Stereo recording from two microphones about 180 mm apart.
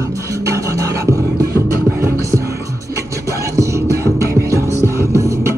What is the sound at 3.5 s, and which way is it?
Music, 15° right (ahead or behind).